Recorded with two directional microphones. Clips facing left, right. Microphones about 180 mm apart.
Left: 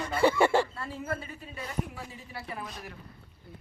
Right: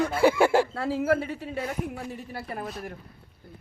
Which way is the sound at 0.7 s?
90° right.